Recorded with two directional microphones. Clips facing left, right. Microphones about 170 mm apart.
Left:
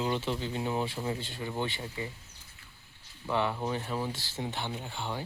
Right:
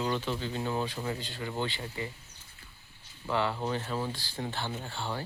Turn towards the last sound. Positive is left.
turn(degrees=15)  # may be behind; listen again after turning